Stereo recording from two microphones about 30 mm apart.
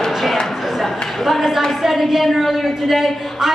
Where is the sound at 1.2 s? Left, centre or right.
Centre.